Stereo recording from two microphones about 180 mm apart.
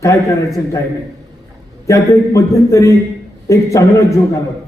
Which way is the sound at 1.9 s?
15° left (ahead or behind).